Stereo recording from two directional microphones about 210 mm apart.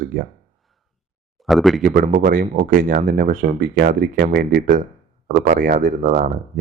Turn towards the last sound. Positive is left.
turn(degrees=-40)  # may be behind; listen again after turning